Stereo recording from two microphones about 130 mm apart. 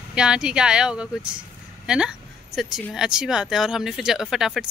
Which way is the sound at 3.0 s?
5° right (ahead or behind).